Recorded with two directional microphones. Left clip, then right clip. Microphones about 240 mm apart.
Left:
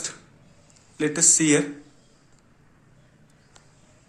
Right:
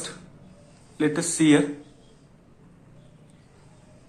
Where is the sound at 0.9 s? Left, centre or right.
Left.